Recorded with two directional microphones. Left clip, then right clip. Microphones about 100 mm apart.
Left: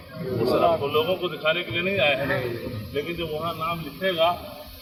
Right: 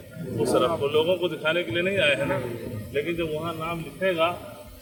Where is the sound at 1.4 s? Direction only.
50° right (ahead or behind).